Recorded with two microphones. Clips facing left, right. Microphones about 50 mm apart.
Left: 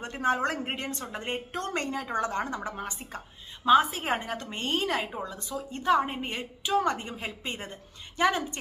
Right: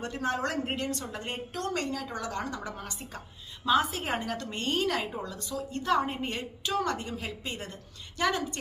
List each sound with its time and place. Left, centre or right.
0.0 s a woman's voice: left